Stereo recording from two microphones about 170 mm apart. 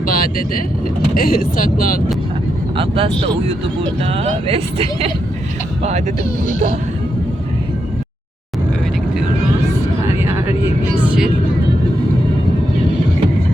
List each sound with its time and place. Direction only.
0.0 s speech: 55° left (ahead or behind)
2.7 s speech: 35° right (ahead or behind)
11.0 s vehicle: 10° right (ahead or behind)